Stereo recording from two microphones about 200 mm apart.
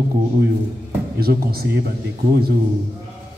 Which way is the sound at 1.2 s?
50° right (ahead or behind).